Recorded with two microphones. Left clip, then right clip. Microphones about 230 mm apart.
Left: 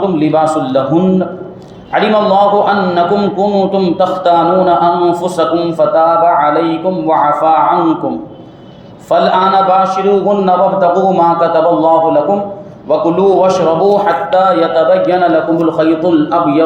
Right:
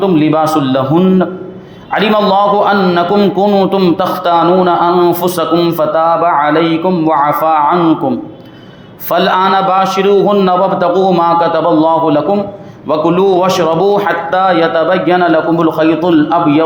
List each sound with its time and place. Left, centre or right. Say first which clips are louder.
0.0 s a man's voice: right 1 dB; right
9.0 s a man's voice: left 1 dB; right